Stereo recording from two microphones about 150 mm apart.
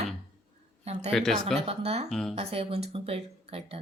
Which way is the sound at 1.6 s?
40° right (ahead or behind).